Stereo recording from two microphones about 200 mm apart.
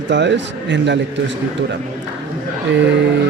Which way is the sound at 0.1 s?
60° right (ahead or behind).